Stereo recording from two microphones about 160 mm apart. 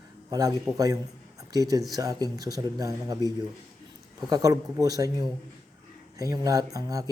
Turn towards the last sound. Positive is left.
turn(degrees=-20)  # may be behind; listen again after turning